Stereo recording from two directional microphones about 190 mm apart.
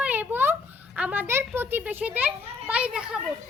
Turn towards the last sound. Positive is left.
turn(degrees=-5)  # may be behind; listen again after turning